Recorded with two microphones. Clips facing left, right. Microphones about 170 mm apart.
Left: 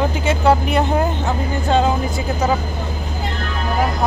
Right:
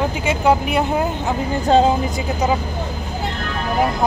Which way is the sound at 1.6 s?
35° right (ahead or behind).